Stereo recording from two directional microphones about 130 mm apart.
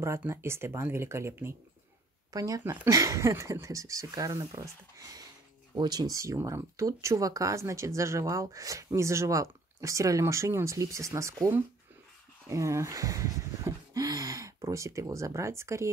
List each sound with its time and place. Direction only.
0.0 s speech: 20° right (ahead or behind)
12.4 s speech: 20° right (ahead or behind)